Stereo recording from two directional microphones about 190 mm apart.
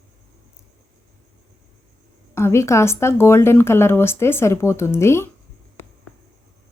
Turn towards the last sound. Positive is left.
turn(degrees=15)  # may be behind; listen again after turning